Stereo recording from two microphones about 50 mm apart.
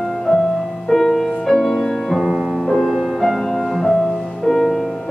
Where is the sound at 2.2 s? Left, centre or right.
Centre.